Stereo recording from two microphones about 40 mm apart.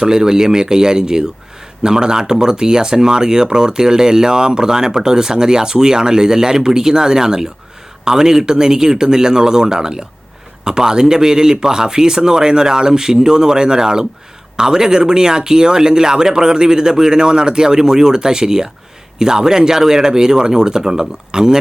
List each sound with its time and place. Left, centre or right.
0.0 s speech: centre